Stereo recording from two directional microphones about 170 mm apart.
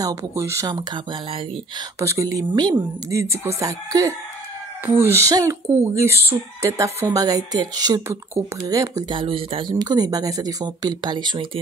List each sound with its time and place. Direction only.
0.0 s speech: 15° right (ahead or behind)